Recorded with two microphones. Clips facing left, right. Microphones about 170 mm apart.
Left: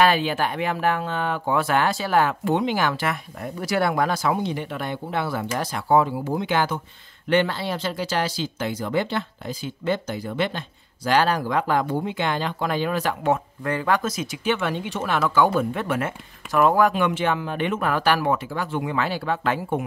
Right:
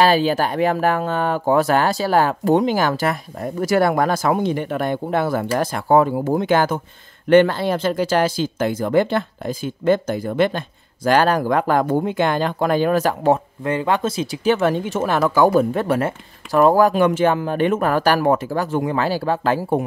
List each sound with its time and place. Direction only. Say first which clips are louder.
0.0 s speech: right 4 dB; 35° right (ahead or behind)
13.7 s speech: right 3 dB; 20° right (ahead or behind)